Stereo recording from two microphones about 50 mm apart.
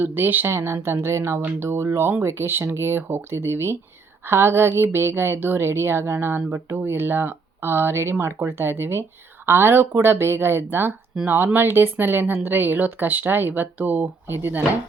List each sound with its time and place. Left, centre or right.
0.0 s a woman's voice: right
0.4 s a woman's voice: right
14.3 s a woman's voice: right